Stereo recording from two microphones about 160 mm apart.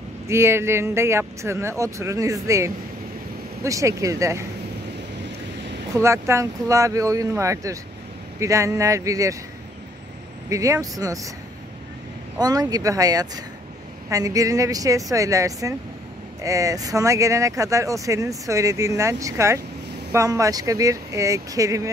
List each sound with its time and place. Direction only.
0.3 s speech: 15° right (ahead or behind)
5.9 s speech: 15° right (ahead or behind)
10.5 s speech: 20° right (ahead or behind)
12.4 s speech: 25° right (ahead or behind)